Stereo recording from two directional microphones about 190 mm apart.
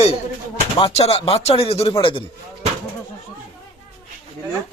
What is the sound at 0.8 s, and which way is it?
Speech, 30° left (ahead or behind).